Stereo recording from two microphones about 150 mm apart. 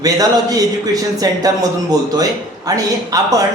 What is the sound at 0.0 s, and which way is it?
Speech, 25° right (ahead or behind).